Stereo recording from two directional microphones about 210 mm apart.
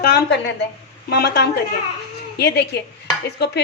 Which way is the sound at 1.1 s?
50° left (ahead or behind).